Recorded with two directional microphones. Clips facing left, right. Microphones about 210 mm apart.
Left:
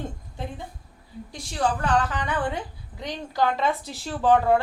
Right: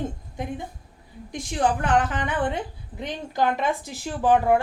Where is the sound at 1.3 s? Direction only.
20° right (ahead or behind).